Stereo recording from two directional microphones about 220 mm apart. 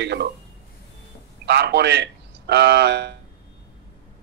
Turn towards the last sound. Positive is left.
turn(degrees=-50)  # may be behind; listen again after turning